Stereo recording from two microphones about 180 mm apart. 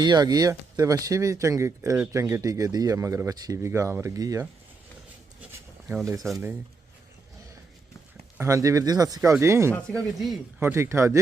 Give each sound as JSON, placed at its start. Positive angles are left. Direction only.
{"t": 0.0, "sound": "speech", "side_deg": -25}
{"t": 5.5, "sound": "a sound", "side_deg": -10}
{"t": 8.4, "sound": "speech", "side_deg": -15}
{"t": 9.7, "sound": "speech", "side_deg": 5}
{"t": 10.6, "sound": "speech", "side_deg": -15}